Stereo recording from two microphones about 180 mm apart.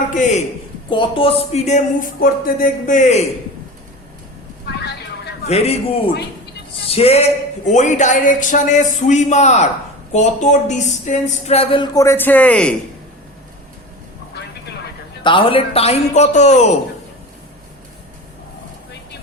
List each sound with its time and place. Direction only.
0.1 s a man's voice: 40° left (ahead or behind)
0.9 s speech: 30° left (ahead or behind)
4.8 s a sound: 65° left (ahead or behind)
5.5 s speech: 35° left (ahead or behind); by 12.7 s 5° left (ahead or behind)
15.2 s speech: 30° left (ahead or behind)